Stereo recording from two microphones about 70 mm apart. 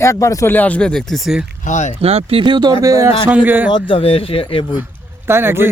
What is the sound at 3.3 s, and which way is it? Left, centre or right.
Speech, right.